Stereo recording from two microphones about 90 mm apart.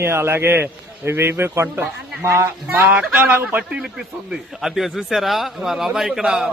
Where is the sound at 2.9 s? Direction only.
15° right (ahead or behind).